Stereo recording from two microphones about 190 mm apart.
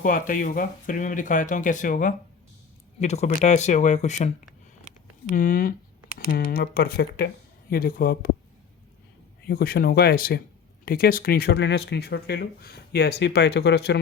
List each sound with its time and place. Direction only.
0.0 s speech: 45° left (ahead or behind)
5.3 s speech: 45° left (ahead or behind)
9.5 s speech: 50° left (ahead or behind)